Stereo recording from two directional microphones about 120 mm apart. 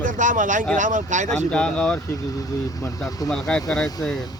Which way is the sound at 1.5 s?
10° left (ahead or behind).